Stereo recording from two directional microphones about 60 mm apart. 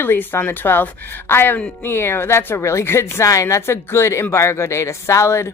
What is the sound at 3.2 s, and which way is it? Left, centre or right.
Speech, left.